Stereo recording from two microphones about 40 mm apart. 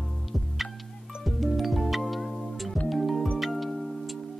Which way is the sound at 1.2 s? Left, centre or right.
Centre.